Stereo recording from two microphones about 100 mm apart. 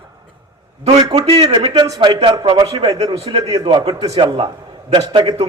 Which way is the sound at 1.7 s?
45° right (ahead or behind).